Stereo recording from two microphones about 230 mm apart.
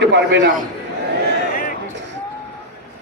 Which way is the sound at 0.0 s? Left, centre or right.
Right.